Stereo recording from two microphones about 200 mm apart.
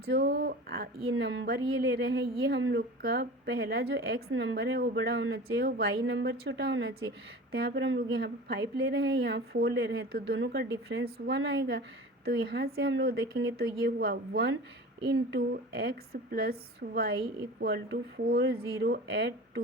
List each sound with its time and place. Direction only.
0.0 s speech: 50° right (ahead or behind)
1.0 s a woman's voice: 75° right (ahead or behind); by 4.2 s 55° right (ahead or behind)
4.3 s a woman's voice: 70° right (ahead or behind)
7.5 s speech: 55° right (ahead or behind)